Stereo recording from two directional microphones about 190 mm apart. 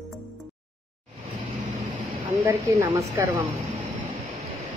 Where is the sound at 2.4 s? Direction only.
15° right (ahead or behind).